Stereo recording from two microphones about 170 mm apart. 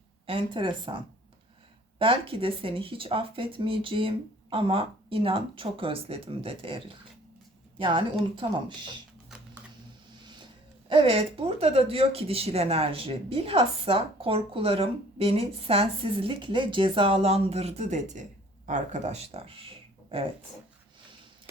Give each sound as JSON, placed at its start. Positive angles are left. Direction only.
{"t": 0.3, "sound": "speech", "side_deg": -30}
{"t": 10.8, "sound": "speech", "side_deg": -30}